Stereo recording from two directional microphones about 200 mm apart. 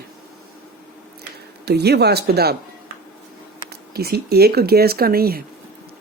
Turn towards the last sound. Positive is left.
turn(degrees=-50)  # may be behind; listen again after turning